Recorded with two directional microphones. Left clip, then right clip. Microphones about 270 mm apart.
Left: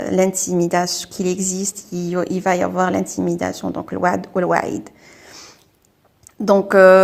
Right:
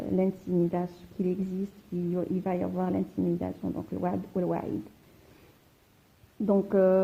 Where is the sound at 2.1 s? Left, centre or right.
Centre.